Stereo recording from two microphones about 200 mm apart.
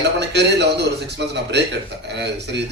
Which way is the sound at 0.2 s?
60° right (ahead or behind).